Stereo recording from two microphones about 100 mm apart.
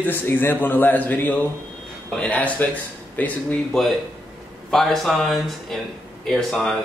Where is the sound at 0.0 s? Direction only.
20° left (ahead or behind).